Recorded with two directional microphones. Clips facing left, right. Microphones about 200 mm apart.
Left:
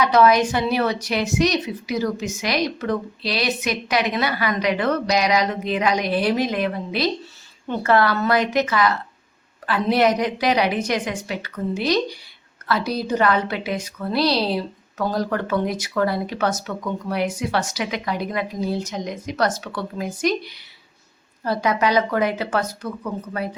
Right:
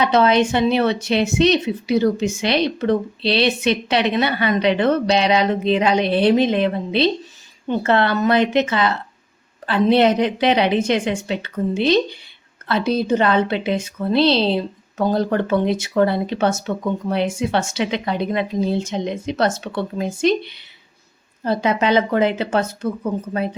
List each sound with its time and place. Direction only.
0.0 s a woman's voice: 25° right (ahead or behind)